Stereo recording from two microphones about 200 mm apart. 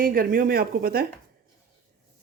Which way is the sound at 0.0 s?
45° right (ahead or behind).